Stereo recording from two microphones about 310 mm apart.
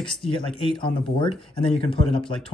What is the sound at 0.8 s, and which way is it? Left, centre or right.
Speech, centre.